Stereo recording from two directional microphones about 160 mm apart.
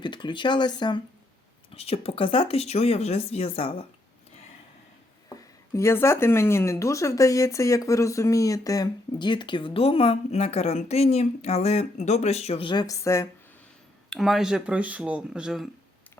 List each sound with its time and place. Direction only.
0.0 s speech: 30° left (ahead or behind)
1.7 s speech: 40° left (ahead or behind)
5.3 s speech: 20° left (ahead or behind)
14.1 s speech: centre (ahead or behind)